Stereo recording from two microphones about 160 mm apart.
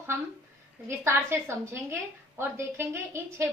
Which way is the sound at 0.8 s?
15° right (ahead or behind).